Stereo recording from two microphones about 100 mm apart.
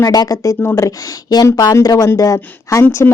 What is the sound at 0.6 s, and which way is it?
A woman's voice, 25° left (ahead or behind).